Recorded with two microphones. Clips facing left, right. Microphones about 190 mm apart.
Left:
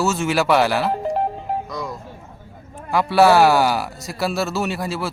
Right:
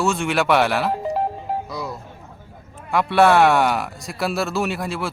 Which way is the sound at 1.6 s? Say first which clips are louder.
Left 1 dB; 10° right (ahead or behind).